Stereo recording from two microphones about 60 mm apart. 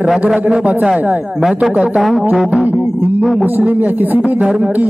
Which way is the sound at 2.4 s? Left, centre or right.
Centre.